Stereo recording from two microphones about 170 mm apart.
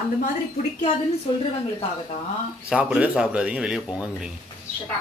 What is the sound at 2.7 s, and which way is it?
Speech, 10° right (ahead or behind).